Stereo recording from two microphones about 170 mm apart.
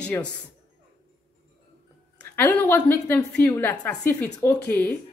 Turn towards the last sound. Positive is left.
turn(degrees=15)  # may be behind; listen again after turning